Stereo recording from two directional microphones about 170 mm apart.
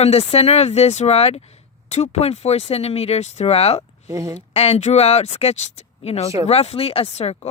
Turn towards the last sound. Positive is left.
turn(degrees=40)  # may be behind; listen again after turning